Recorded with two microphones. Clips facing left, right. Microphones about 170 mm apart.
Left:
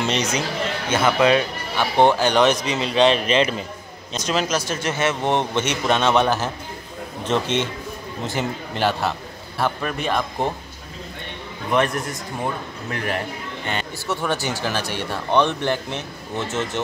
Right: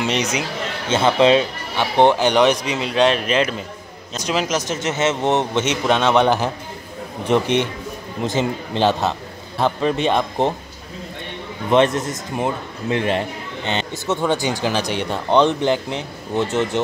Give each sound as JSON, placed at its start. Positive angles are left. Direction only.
{"t": 0.0, "sound": "speech", "side_deg": -15}
{"t": 0.8, "sound": "speech", "side_deg": -25}
{"t": 11.7, "sound": "speech", "side_deg": -25}